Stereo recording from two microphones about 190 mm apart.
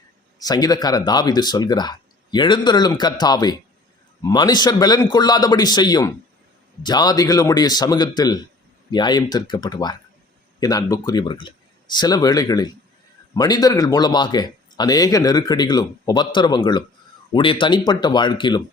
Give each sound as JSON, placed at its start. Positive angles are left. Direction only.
{"t": 0.3, "sound": "speech", "side_deg": 20}